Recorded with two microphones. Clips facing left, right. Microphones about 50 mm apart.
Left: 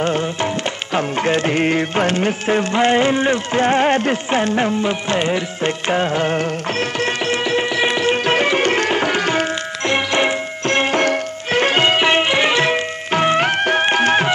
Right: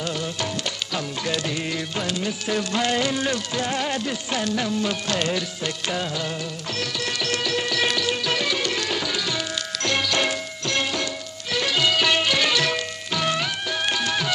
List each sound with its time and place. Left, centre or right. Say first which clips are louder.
0.0 s music: left 9 dB; left
9.8 s music: left 6 dB; left